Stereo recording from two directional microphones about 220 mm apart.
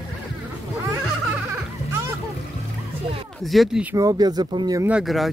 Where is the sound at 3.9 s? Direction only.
15° right (ahead or behind); by 5.3 s centre (ahead or behind).